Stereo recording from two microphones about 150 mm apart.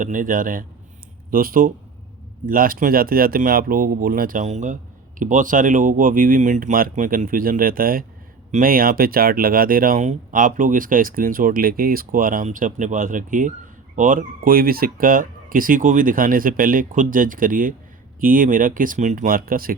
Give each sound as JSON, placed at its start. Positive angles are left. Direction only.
{"t": 0.0, "sound": "speech", "side_deg": -60}